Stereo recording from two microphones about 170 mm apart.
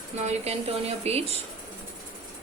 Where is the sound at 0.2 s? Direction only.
40° right (ahead or behind).